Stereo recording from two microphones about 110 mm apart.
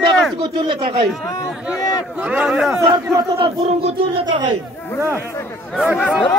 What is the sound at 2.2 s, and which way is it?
Speech, 10° right (ahead or behind).